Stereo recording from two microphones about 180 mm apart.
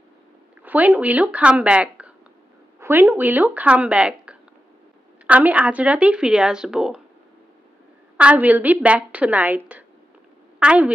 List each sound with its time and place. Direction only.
0.6 s speech: 10° right (ahead or behind)
8.2 s speech: 10° right (ahead or behind)
10.6 s a woman's voice: 5° right (ahead or behind)